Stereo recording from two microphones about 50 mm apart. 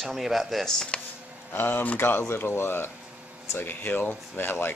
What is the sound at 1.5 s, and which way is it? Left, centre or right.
Speech, left.